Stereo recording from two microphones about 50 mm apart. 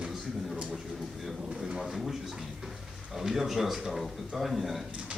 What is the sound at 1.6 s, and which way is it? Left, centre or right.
Speech, centre.